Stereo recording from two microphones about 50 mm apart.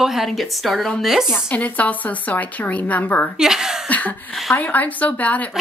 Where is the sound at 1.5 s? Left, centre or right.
Left.